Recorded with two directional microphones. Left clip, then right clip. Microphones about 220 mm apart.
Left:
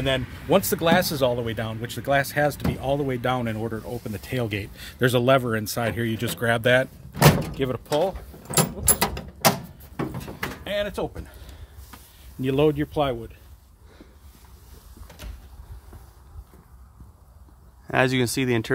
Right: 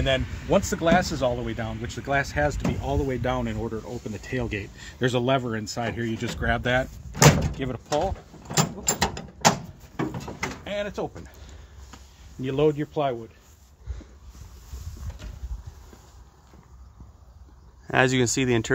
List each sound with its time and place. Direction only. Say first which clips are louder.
0.0 s speech: even; 30° left (ahead or behind)
8.5 s mechanisms: left 1 dB; 20° left (ahead or behind)
10.6 s speech: left 5 dB; 35° left (ahead or behind)
12.4 s speech: left 2 dB; 55° left (ahead or behind)
17.8 s speech: even; centre (ahead or behind)